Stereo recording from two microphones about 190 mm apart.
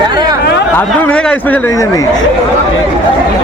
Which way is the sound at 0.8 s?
10° left (ahead or behind).